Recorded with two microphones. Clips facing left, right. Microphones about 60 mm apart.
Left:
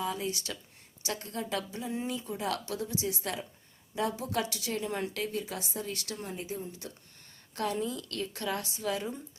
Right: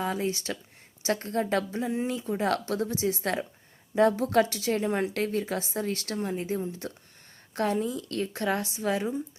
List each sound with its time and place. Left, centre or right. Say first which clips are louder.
0.0 s a woman's voice: right 4 dB; right